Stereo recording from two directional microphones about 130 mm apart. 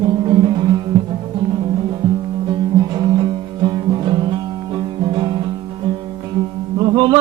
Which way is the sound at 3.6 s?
35° right (ahead or behind).